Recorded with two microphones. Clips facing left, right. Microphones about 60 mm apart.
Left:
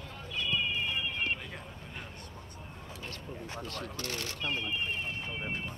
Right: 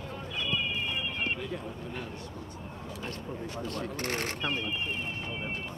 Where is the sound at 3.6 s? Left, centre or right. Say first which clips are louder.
Right 7 dB; right.